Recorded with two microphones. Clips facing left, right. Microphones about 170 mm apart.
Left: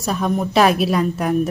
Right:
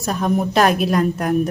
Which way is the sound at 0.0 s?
Centre (ahead or behind).